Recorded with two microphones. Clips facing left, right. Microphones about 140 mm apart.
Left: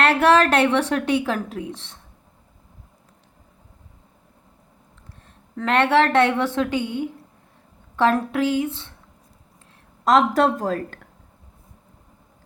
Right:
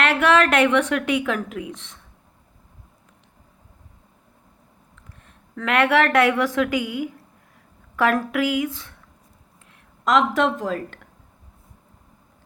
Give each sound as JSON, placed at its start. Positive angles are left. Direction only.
{"t": 0.0, "sound": "a woman's voice", "side_deg": 35}
{"t": 5.2, "sound": "a woman's voice", "side_deg": 35}
{"t": 10.0, "sound": "a woman's voice", "side_deg": 40}